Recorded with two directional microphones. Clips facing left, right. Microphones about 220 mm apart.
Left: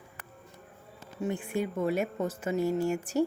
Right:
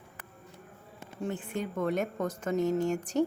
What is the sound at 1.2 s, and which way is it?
Speech, 10° left (ahead or behind).